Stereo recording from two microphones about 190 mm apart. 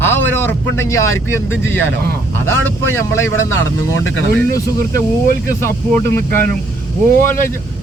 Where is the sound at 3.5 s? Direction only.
85° left.